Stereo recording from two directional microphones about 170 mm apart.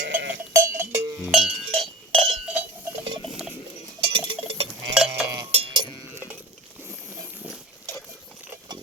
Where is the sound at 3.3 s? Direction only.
5° right (ahead or behind).